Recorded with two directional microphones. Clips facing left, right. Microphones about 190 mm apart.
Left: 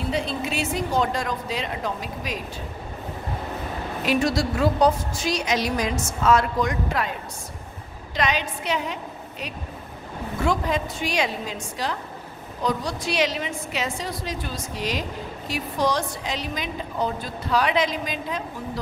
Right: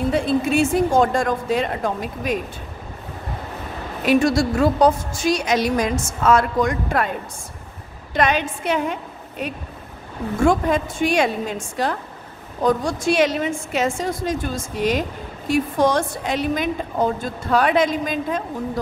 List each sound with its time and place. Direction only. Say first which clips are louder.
0.1 s a woman's voice: right 7 dB; 50° right (ahead or behind)
4.0 s a woman's voice: right 6 dB; 50° right (ahead or behind)
10.4 s a woman's voice: right 6 dB; 50° right (ahead or behind)